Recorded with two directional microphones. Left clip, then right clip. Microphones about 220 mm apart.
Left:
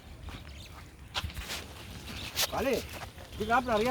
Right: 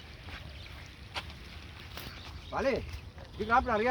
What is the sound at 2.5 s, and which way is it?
Speech, 5° right (ahead or behind).